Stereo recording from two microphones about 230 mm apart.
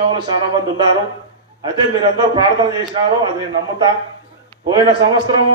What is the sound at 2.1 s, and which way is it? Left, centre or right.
A man's voice, centre.